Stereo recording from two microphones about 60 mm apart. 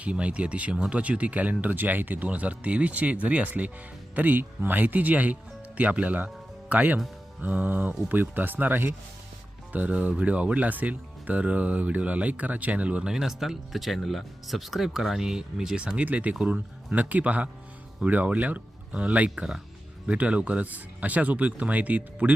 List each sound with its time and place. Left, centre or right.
0.0 s speech: right
9.7 s speech: right
16.6 s speech: right